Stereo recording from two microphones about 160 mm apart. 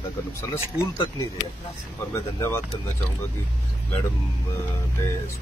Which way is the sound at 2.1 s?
15° left (ahead or behind).